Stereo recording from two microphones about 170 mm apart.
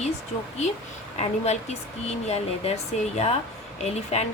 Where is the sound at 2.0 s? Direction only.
40° left (ahead or behind).